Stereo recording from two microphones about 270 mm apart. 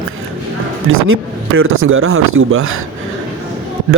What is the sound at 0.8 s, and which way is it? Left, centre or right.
Speech, right.